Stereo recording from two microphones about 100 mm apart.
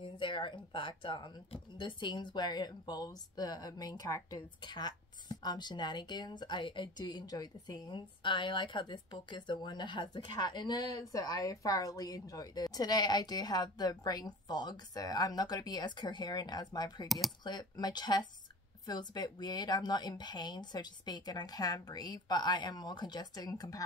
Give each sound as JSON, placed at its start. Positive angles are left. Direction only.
{"t": 0.0, "sound": "a woman's voice", "side_deg": 55}